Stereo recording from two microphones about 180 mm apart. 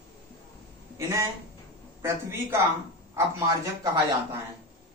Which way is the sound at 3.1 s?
20° right (ahead or behind).